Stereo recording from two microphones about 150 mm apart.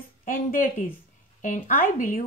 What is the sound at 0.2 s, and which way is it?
Speech, 65° left (ahead or behind).